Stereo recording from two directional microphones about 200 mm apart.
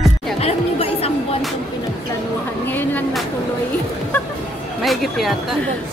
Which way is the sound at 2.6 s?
10° left (ahead or behind).